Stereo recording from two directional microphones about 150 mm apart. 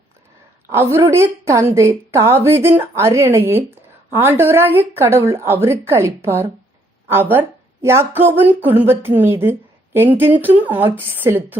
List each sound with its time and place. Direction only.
0.7 s a woman's voice: 15° right (ahead or behind)